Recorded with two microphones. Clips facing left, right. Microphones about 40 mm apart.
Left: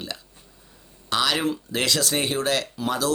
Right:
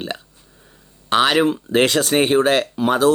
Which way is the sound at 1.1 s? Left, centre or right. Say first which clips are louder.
Right 8 dB; right.